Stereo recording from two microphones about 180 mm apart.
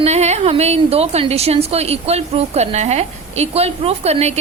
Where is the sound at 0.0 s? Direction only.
40° right (ahead or behind).